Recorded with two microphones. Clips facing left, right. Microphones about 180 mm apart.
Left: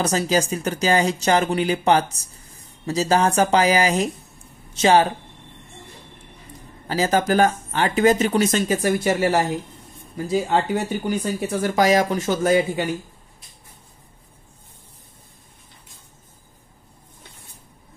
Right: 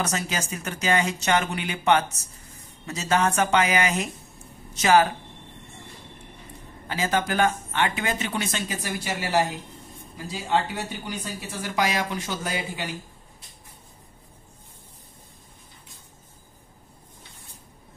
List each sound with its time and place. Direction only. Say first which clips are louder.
0.0 s a woman's voice: left 8 dB; 35° left (ahead or behind)
6.9 s speech: left 6 dB; 40° left (ahead or behind)